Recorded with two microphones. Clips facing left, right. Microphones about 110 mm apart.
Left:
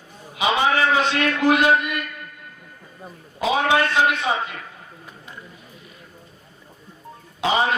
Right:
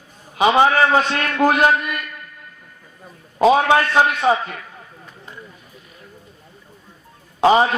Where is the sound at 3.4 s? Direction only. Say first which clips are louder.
Right 5 dB; 45° right (ahead or behind).